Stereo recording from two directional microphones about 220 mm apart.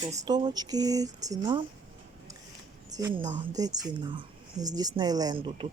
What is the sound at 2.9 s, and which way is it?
Speech, 15° right (ahead or behind).